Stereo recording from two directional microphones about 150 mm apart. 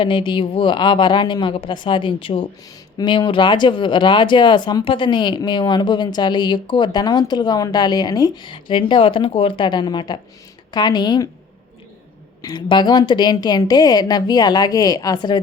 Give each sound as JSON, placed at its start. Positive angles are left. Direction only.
{"t": 0.0, "sound": "a woman's voice", "side_deg": 35}
{"t": 12.4, "sound": "a woman's voice", "side_deg": 30}